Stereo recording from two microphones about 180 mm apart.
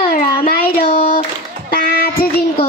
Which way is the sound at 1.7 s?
55° left (ahead or behind).